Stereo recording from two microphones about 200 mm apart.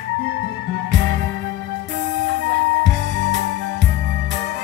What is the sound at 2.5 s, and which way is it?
Music, 65° right (ahead or behind).